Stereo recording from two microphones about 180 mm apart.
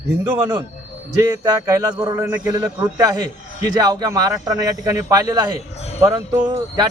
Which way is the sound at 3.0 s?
20° right (ahead or behind).